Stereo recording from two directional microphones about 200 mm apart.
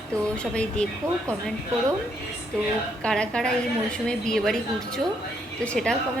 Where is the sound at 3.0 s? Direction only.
5° left (ahead or behind).